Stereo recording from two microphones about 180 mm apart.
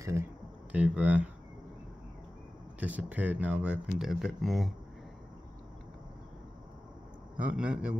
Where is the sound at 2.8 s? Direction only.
10° right (ahead or behind).